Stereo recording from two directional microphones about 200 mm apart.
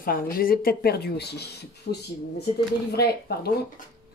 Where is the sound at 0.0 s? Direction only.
45° left (ahead or behind).